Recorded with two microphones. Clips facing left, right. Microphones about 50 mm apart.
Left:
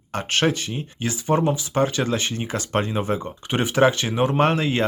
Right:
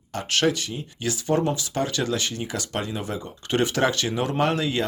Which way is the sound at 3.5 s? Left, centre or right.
Centre.